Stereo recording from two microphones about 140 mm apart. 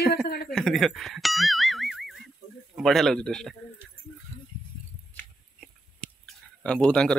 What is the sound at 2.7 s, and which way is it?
Speech, centre (ahead or behind).